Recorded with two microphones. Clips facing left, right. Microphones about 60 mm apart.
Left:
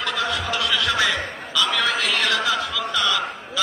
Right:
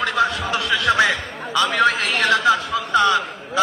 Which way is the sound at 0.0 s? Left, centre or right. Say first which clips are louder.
Right 5 dB; right.